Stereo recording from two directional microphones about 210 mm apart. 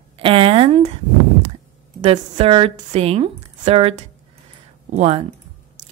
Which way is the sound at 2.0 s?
30° right (ahead or behind).